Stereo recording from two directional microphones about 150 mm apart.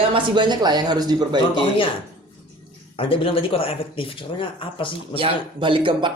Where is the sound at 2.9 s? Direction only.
35° left (ahead or behind).